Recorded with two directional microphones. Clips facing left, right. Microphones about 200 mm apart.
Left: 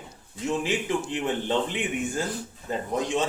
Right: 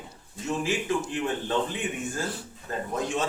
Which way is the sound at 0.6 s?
20° left (ahead or behind).